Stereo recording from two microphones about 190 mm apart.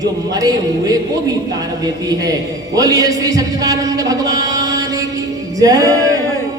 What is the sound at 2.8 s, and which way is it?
A man's voice, 20° right (ahead or behind).